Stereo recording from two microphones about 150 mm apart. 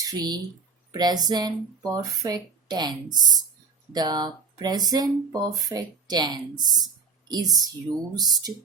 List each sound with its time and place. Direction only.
0.0 s speech: 25° right (ahead or behind)